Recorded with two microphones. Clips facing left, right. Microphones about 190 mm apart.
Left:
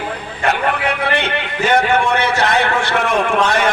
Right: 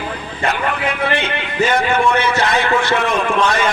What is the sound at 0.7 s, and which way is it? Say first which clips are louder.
A man's voice: left 1 dB; 60° left (ahead or behind).